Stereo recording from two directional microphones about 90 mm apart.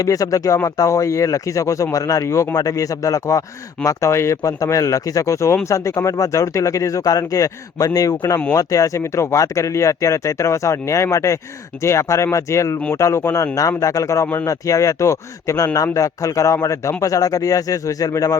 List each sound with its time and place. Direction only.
0.0 s speech: 40° left (ahead or behind)